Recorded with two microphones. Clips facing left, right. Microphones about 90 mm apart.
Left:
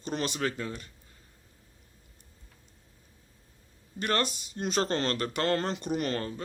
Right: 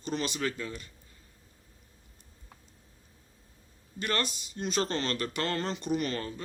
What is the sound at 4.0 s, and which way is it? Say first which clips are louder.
Speech: left 3 dB; 40° left (ahead or behind).